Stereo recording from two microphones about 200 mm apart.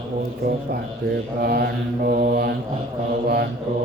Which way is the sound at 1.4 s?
50° right (ahead or behind).